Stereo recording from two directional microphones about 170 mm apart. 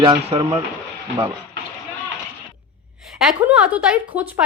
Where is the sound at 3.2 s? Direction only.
5° right (ahead or behind).